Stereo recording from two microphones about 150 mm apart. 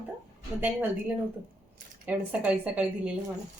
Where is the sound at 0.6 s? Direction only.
10° right (ahead or behind).